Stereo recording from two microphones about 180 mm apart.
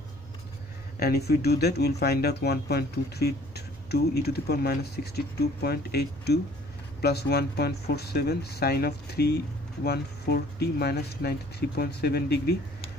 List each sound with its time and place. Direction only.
0.9 s speech: 60° left (ahead or behind)